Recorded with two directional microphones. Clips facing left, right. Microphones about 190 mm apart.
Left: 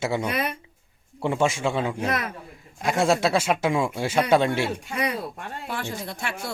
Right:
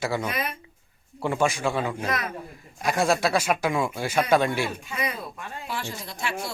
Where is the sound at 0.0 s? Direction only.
20° left (ahead or behind).